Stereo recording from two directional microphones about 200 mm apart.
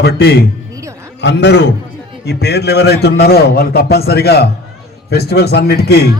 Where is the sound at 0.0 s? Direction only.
55° left (ahead or behind).